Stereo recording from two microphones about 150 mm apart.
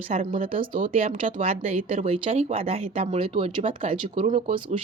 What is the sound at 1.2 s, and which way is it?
Speech, 40° right (ahead or behind).